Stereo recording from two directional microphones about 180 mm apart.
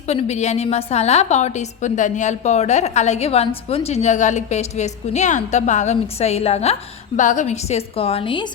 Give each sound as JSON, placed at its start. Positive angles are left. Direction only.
{"t": 0.1, "sound": "a woman's voice", "side_deg": 35}